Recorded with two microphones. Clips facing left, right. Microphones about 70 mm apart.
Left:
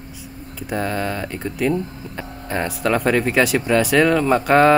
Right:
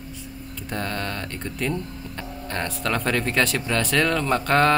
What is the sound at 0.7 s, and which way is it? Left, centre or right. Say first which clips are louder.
A man's voice: left 6 dB; centre.